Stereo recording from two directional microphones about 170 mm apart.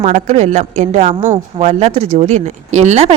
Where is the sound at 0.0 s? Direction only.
40° right (ahead or behind).